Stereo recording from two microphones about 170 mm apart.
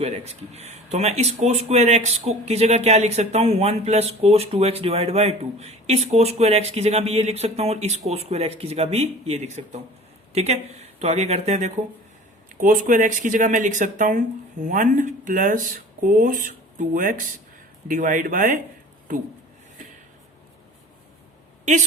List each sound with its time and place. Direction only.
0.0 s speech: 40° right (ahead or behind)
12.5 s speech: 50° right (ahead or behind)